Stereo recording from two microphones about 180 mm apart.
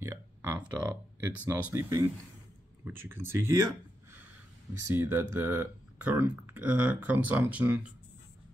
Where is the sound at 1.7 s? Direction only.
15° right (ahead or behind).